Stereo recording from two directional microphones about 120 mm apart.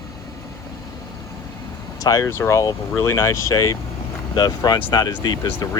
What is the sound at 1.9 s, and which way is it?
Speech, 30° left (ahead or behind).